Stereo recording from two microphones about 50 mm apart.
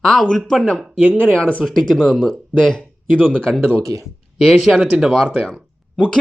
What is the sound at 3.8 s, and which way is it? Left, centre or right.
Speech, right.